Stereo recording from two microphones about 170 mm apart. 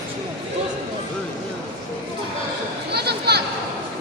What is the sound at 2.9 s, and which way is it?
Chatter, 75° right (ahead or behind).